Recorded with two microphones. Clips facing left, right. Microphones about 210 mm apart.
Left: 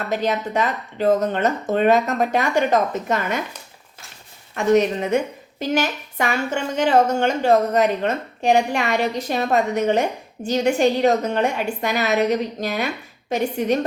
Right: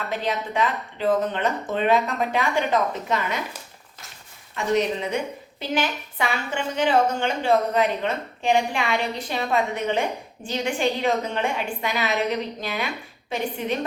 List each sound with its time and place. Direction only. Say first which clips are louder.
0.1 s a woman's voice: left 6 dB; 45° left (ahead or behind)
4.5 s a woman's voice: left 5 dB; 50° left (ahead or behind)